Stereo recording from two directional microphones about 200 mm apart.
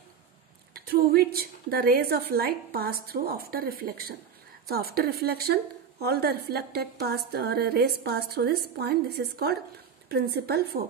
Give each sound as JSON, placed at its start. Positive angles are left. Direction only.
{"t": 0.7, "sound": "a woman's voice", "side_deg": -50}